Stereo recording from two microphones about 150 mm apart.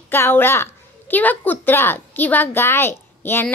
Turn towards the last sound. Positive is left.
turn(degrees=15)  # may be behind; listen again after turning